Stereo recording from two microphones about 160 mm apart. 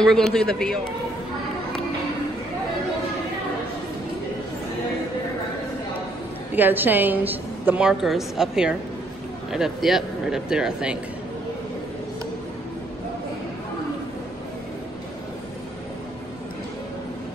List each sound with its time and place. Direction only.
0.0 s speech: 5° left (ahead or behind)
6.5 s a woman's voice: 10° right (ahead or behind)